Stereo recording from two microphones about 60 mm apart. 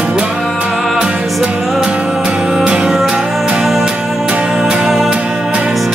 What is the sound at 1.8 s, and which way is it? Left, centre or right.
Music, centre.